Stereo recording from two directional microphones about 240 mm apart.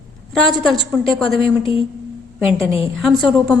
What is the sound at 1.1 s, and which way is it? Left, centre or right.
Speech, centre.